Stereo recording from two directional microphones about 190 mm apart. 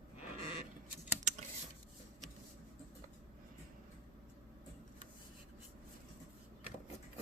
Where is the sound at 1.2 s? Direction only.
40° right (ahead or behind).